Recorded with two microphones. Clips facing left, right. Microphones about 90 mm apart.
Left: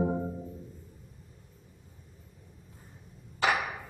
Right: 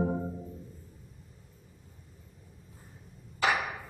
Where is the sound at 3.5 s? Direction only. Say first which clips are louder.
Left 1 dB; centre (ahead or behind).